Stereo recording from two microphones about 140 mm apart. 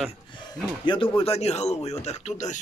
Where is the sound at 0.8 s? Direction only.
35° left (ahead or behind); by 2.4 s 55° left (ahead or behind).